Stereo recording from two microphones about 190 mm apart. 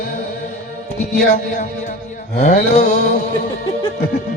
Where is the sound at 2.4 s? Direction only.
40° left (ahead or behind).